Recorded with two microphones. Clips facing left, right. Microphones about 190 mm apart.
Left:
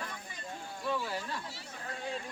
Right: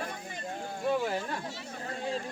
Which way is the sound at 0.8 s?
50° right (ahead or behind).